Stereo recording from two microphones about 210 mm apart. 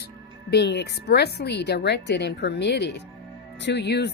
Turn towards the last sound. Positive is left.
turn(degrees=50)  # may be behind; listen again after turning